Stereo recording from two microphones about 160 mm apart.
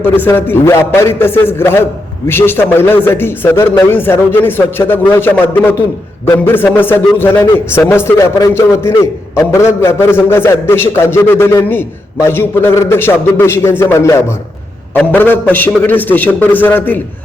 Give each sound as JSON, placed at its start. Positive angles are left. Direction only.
{"t": 0.0, "sound": "a man's voice", "side_deg": 10}